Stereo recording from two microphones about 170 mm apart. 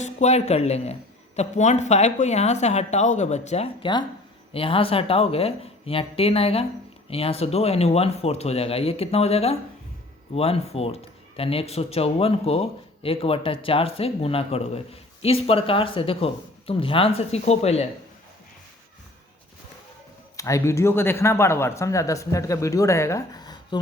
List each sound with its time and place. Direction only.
0.0 s speech: 40° left (ahead or behind)
20.3 s speech: 20° left (ahead or behind)